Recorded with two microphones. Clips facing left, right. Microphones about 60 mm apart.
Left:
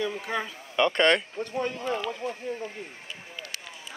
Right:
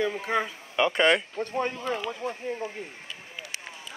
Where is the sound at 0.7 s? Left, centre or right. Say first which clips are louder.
Even; centre.